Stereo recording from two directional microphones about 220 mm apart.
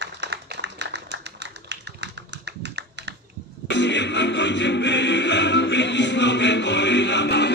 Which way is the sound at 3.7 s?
55° left (ahead or behind).